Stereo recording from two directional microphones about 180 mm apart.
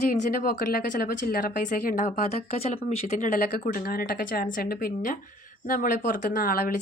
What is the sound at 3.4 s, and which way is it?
Speech, 50° left (ahead or behind).